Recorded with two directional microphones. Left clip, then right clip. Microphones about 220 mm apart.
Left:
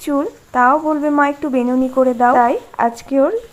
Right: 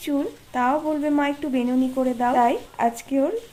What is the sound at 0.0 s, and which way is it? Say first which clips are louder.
Speech: left 7 dB; 15° left (ahead or behind).